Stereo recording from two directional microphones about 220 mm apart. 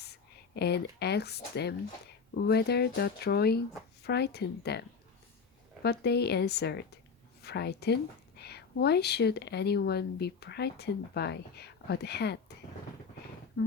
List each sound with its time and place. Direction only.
0.0 s speech: 50° left (ahead or behind)
5.8 s speech: 50° left (ahead or behind)